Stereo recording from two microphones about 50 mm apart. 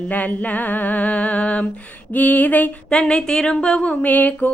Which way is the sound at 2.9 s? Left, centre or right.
Centre.